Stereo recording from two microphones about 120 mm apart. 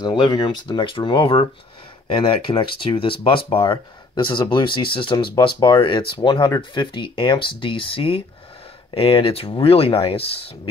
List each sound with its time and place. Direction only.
0.0 s speech: 40° left (ahead or behind)